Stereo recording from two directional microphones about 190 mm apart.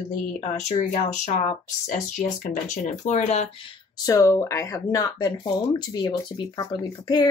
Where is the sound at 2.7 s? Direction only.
40° left (ahead or behind).